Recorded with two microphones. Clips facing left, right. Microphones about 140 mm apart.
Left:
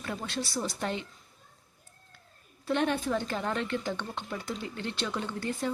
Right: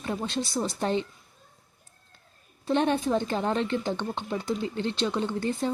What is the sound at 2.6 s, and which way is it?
A woman's voice, 25° right (ahead or behind).